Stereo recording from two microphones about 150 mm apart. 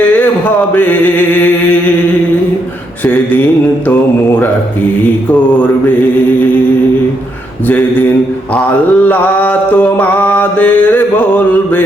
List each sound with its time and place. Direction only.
0.2 s a sound: 10° left (ahead or behind)
3.0 s mantra: 10° left (ahead or behind)
8.5 s mantra: 10° left (ahead or behind)